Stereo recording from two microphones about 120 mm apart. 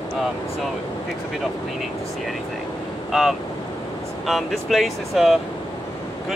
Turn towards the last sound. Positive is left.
turn(degrees=-5)  # may be behind; listen again after turning